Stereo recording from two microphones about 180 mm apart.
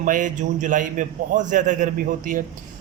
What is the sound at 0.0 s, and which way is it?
A man's voice, 45° right (ahead or behind).